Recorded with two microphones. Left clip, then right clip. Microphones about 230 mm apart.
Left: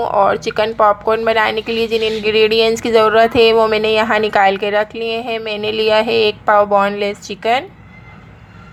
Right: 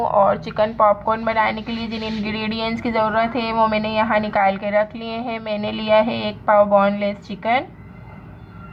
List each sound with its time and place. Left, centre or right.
0.0 s a woman's voice: left